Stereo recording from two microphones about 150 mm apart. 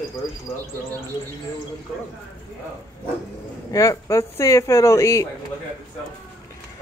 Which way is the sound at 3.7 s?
20° left (ahead or behind).